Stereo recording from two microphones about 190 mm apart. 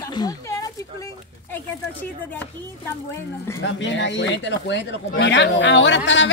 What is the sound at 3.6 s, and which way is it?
Speech, 70° left (ahead or behind).